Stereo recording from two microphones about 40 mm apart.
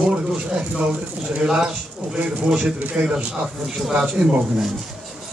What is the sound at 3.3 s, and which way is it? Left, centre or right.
Speech, centre.